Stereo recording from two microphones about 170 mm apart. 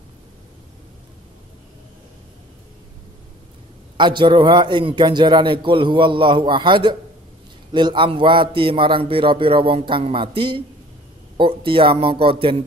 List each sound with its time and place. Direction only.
3.9 s a man's voice: 25° right (ahead or behind)